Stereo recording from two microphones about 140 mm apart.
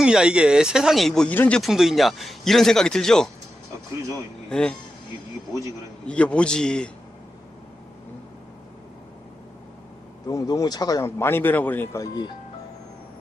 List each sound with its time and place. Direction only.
0.0 s speech: 5° right (ahead or behind)
4.4 s speech: 5° left (ahead or behind)
6.1 s a man's voice: 10° left (ahead or behind)
10.2 s speech: 30° left (ahead or behind)